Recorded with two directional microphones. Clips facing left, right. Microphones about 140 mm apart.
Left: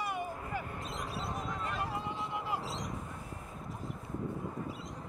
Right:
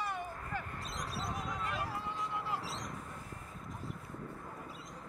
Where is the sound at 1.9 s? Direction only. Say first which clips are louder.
Left 2 dB; 20° left (ahead or behind).